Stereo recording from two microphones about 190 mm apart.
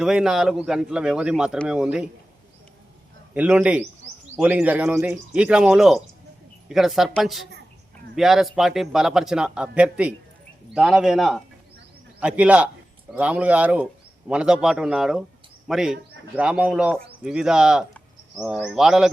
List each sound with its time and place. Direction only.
0.0 s speech: 5° right (ahead or behind)
3.3 s speech: 5° right (ahead or behind)